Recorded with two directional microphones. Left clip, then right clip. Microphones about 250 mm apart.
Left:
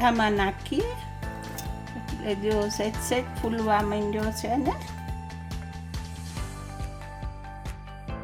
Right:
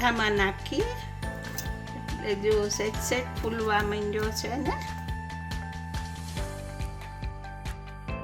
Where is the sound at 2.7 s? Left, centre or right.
Left.